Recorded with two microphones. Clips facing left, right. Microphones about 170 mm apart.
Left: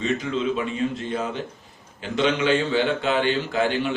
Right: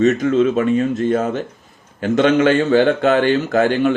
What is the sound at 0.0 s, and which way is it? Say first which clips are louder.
A man's voice: right 10 dB; 45° right (ahead or behind).